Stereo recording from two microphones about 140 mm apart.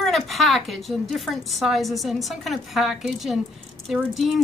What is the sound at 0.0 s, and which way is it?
A woman's voice, centre (ahead or behind).